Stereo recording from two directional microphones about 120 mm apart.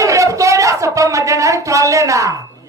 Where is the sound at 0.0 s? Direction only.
25° right (ahead or behind).